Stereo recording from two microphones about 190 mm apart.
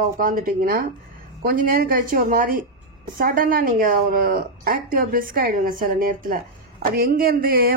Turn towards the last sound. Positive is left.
turn(degrees=-50)  # may be behind; listen again after turning